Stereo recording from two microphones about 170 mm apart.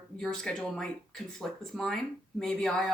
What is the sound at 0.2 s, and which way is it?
Speech, 5° left (ahead or behind).